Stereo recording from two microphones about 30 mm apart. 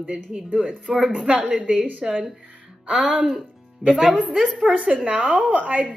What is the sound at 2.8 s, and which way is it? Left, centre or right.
Speech, right.